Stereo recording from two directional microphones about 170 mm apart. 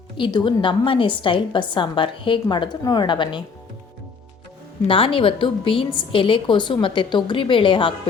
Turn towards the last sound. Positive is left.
turn(degrees=30)  # may be behind; listen again after turning